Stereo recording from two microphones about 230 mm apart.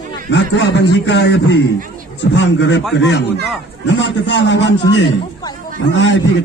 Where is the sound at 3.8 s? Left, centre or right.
Left.